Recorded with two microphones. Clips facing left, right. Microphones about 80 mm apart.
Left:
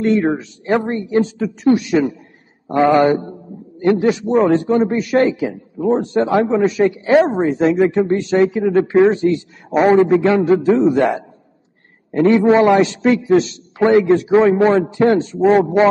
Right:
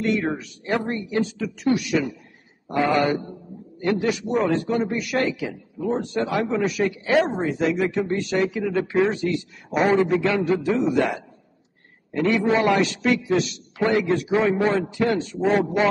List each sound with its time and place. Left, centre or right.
0.0 s a man's voice: left
12.4 s a man's voice: left